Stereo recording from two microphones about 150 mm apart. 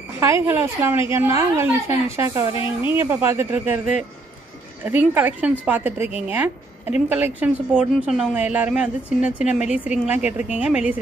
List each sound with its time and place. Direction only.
0.2 s a woman's voice: 20° right (ahead or behind)
4.8 s a woman's voice: 10° right (ahead or behind)